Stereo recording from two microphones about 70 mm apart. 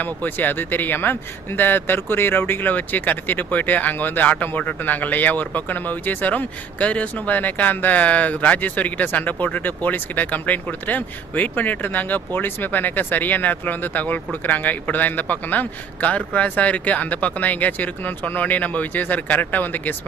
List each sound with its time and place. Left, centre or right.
0.0 s speech: left